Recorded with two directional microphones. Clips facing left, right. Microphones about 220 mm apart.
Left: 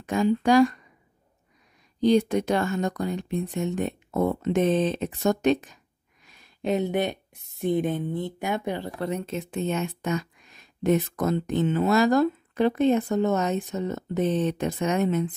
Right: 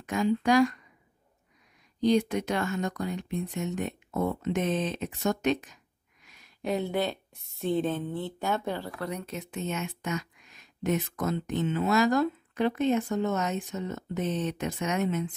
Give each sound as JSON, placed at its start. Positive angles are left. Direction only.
{"t": 0.0, "sound": "speech", "side_deg": 30}
{"t": 2.0, "sound": "speech", "side_deg": 30}